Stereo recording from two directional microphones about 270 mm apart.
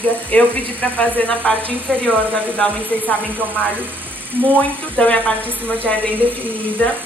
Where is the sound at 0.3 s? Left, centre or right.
Centre.